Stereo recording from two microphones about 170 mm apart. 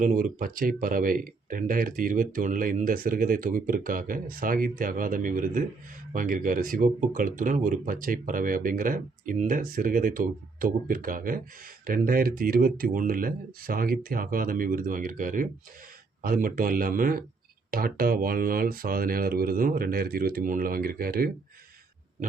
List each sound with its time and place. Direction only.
0.0 s speech: 55° right (ahead or behind)